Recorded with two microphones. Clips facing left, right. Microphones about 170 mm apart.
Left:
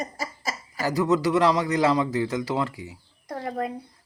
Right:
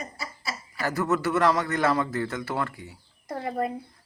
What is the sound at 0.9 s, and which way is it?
Speech, 15° left (ahead or behind).